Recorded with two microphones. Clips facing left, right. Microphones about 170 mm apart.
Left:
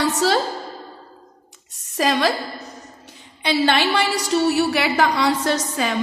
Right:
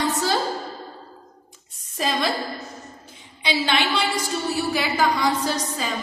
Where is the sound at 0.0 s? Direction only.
70° left (ahead or behind).